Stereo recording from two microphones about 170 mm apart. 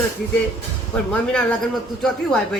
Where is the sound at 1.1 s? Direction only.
5° left (ahead or behind).